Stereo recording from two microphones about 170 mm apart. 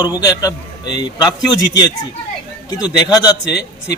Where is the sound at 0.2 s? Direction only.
20° left (ahead or behind).